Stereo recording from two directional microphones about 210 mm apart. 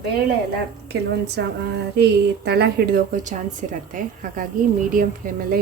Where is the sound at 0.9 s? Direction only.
55° right (ahead or behind).